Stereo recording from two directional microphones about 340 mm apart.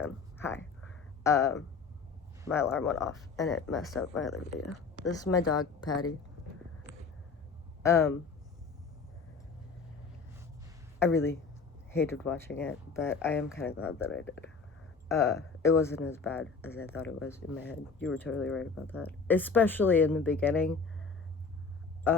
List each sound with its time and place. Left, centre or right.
0.0 s a sound: centre
2.5 s speech: centre
4.6 s speech: left
5.5 s speech: centre
6.9 s a sound: left
7.8 s speech: centre
11.0 s speech: centre
22.1 s speech: centre